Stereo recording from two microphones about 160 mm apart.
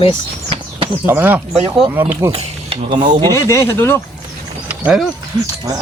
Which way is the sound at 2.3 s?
40° right (ahead or behind).